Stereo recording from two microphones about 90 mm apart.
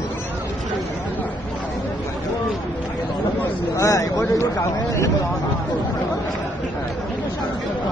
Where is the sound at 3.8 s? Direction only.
35° left (ahead or behind).